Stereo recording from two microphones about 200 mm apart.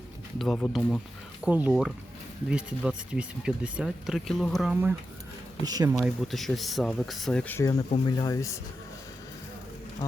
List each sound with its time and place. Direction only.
0.3 s speech: centre (ahead or behind)
1.4 s speech: 5° right (ahead or behind)
5.6 s speech: 20° right (ahead or behind)
6.0 s speech: centre (ahead or behind); by 8.5 s 15° left (ahead or behind)